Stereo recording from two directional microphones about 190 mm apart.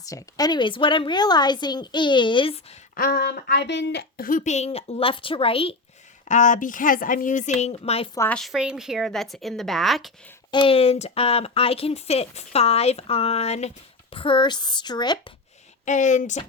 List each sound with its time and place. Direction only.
0.0 s speech: 20° left (ahead or behind)
2.9 s speech: 55° left (ahead or behind)
4.3 s speech: 40° left (ahead or behind)
6.2 s speech: 40° left (ahead or behind)
8.1 s a woman's voice: 15° left (ahead or behind)
8.4 s a woman's voice: centre (ahead or behind)
10.5 s speech: 30° left (ahead or behind)
15.9 s speech: 40° left (ahead or behind)